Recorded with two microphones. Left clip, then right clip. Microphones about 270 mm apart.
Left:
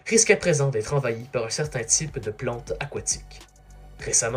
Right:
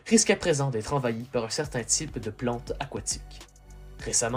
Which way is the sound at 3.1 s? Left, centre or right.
Right.